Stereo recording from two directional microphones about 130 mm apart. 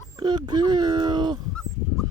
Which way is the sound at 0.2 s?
35° right (ahead or behind).